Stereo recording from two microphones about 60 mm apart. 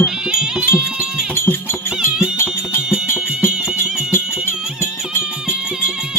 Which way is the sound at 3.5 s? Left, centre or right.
Centre.